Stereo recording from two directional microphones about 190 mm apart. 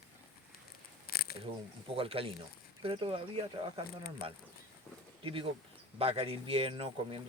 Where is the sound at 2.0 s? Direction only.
30° right (ahead or behind).